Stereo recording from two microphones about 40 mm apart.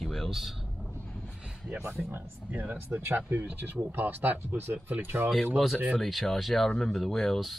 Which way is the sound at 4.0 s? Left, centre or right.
Right.